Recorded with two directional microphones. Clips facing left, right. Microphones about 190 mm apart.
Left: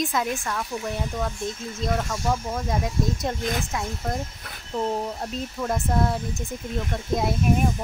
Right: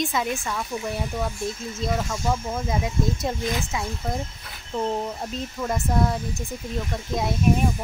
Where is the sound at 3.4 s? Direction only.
50° left (ahead or behind).